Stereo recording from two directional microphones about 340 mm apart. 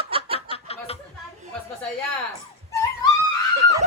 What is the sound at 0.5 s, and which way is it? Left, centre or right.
Chuckle, centre.